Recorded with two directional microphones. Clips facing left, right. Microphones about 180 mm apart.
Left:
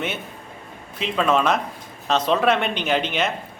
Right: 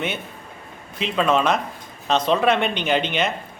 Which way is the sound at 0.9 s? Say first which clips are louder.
Even; centre (ahead or behind).